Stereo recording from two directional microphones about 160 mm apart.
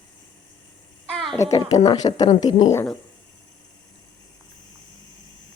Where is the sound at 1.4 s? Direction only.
20° left (ahead or behind).